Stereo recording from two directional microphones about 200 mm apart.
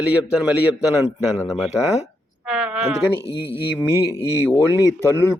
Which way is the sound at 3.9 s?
15° right (ahead or behind).